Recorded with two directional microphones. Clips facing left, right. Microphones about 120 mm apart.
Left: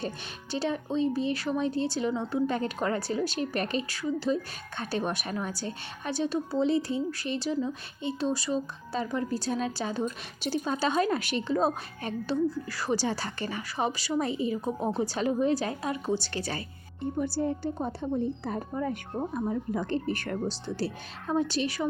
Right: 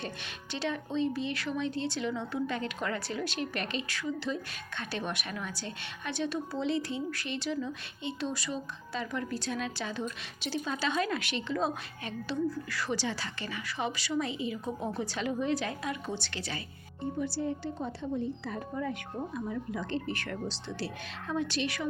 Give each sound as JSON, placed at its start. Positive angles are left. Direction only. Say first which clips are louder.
{"t": 0.5, "sound": "a woman's voice", "louder": "left 4 dB", "side_deg": 35}